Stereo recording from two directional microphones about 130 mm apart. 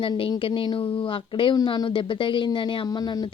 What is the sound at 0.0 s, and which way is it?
A woman's voice, 40° left (ahead or behind).